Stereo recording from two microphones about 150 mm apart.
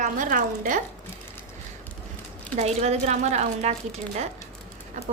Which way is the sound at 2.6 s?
45° right (ahead or behind).